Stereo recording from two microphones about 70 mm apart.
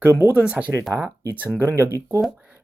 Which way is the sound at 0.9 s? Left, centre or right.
Right.